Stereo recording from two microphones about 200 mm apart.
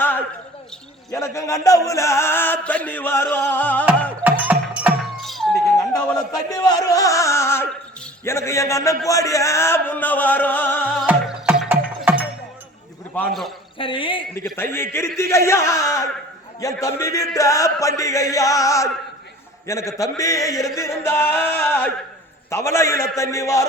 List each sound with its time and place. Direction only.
0.0 s a sound: 10° left (ahead or behind)
1.1 s chant: 15° left (ahead or behind)
4.2 s music: 10° right (ahead or behind)
6.1 s music: 20° left (ahead or behind)
8.2 s chant: 15° left (ahead or behind)
9.0 s music: 15° left (ahead or behind)
11.0 s music: 5° right (ahead or behind)
13.1 s a man's voice: centre (ahead or behind)
13.7 s speech: 25° left (ahead or behind)
14.5 s chant: 10° left (ahead or behind)